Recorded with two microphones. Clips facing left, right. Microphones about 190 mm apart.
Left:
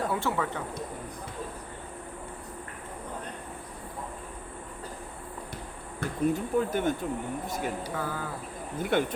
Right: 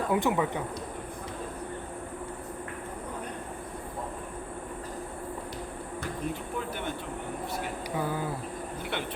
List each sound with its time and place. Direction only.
0.1 s speech: 15° right (ahead or behind)
6.0 s speech: 45° left (ahead or behind)
7.9 s speech: 20° right (ahead or behind)
8.9 s speech: 45° left (ahead or behind)